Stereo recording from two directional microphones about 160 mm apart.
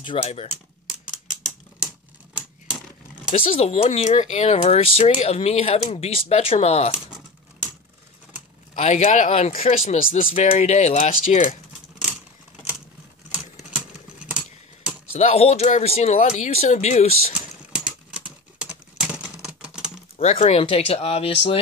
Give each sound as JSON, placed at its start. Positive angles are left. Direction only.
{"t": 0.0, "sound": "speech", "side_deg": 35}
{"t": 3.3, "sound": "speech", "side_deg": 40}
{"t": 8.7, "sound": "speech", "side_deg": 45}
{"t": 13.6, "sound": "typing", "side_deg": -5}
{"t": 15.1, "sound": "speech", "side_deg": 40}
{"t": 17.7, "sound": "a sound", "side_deg": -5}
{"t": 19.4, "sound": "typing", "side_deg": -5}
{"t": 20.2, "sound": "speech", "side_deg": 40}